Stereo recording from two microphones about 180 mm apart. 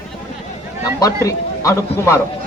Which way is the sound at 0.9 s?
20° left (ahead or behind).